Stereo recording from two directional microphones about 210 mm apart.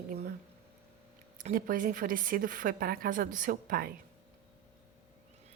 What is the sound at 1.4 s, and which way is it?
Speech, 40° right (ahead or behind).